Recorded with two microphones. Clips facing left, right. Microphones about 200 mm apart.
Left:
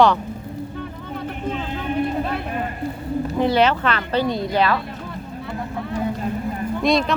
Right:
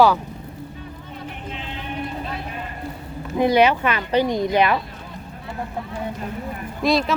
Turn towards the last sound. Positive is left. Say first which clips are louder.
# left 1 dB
turn(degrees=0)  # may be behind; listen again after turning